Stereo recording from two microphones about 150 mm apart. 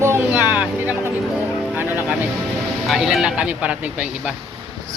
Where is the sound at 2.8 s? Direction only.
Centre (ahead or behind).